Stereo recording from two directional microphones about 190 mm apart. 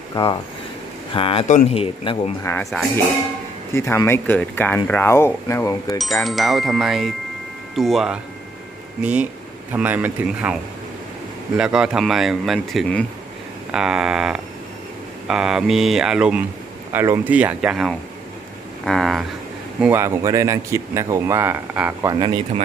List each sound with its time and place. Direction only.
0.1 s speech: 20° left (ahead or behind)
2.4 s speech: 10° left (ahead or behind)
3.7 s speech: 15° left (ahead or behind)
6.0 s speech: centre (ahead or behind)
19.8 s speech: 10° right (ahead or behind)
22.1 s speech: 25° right (ahead or behind)